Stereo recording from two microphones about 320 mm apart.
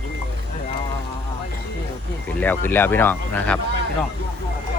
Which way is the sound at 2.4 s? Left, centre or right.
Centre.